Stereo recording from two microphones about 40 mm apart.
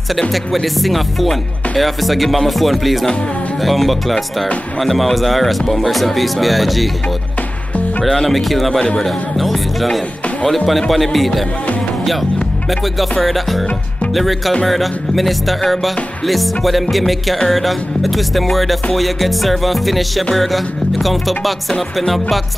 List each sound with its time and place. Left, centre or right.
0.3 s music: centre
8.0 s music: centre
12.0 s speech: centre
13.2 s music: centre